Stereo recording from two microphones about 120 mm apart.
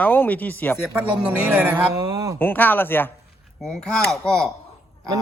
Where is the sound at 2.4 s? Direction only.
15° left (ahead or behind).